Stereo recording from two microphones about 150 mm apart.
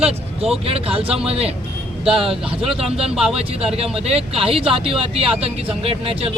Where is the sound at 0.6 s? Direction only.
40° right (ahead or behind).